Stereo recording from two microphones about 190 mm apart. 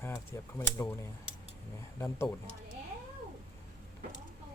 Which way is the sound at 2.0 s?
15° left (ahead or behind).